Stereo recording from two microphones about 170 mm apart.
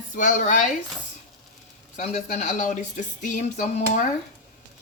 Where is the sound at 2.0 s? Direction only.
45° left (ahead or behind).